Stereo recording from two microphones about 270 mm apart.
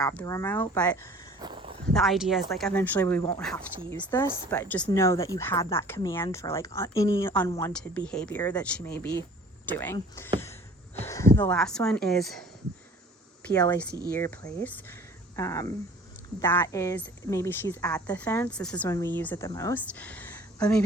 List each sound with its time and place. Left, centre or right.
0.0 s a woman's voice: centre
1.4 s a sound: centre
1.9 s a woman's voice: centre
13.6 s a woman's voice: centre